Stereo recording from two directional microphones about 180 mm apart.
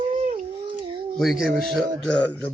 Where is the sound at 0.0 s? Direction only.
30° right (ahead or behind).